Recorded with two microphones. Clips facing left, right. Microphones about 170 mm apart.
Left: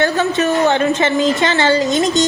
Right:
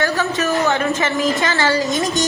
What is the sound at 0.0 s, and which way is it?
A woman's voice, 25° left (ahead or behind).